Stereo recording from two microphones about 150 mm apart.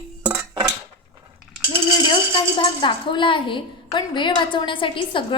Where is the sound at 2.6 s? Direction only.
35° left (ahead or behind).